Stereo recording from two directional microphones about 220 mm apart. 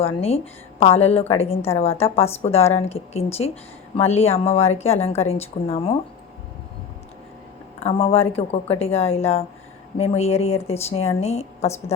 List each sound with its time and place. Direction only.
0.0 s a woman's voice: 25° left (ahead or behind)
7.8 s a woman's voice: 25° left (ahead or behind)